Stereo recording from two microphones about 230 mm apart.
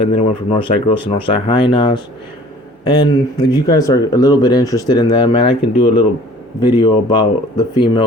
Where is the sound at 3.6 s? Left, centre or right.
Centre.